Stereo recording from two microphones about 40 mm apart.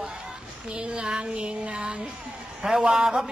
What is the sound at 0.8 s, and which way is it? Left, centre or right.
A man's voice, right.